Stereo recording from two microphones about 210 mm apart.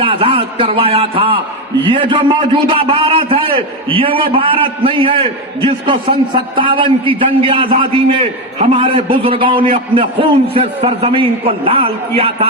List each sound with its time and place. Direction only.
0.0 s a man's voice: 25° right (ahead or behind)